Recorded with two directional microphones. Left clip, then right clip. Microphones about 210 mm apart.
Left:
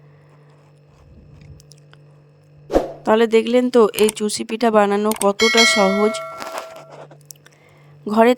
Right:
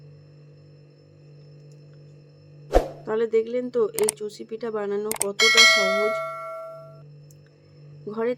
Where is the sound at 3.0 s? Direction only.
50° left (ahead or behind).